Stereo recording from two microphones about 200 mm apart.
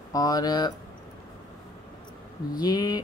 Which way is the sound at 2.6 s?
20° left (ahead or behind).